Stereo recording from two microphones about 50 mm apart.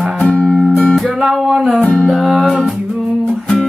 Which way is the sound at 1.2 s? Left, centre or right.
Centre.